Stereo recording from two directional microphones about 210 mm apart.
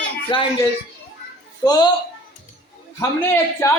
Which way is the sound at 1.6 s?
20° left (ahead or behind).